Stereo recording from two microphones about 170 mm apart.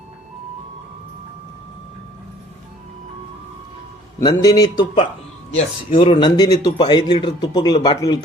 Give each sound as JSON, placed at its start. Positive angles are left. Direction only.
{"t": 4.2, "sound": "speech", "side_deg": 20}